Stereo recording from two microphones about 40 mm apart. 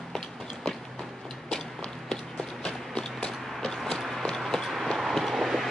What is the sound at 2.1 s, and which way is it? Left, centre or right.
Clip-clop, centre.